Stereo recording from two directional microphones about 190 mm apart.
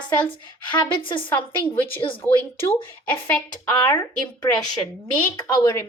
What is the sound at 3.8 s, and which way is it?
Speech, 20° left (ahead or behind).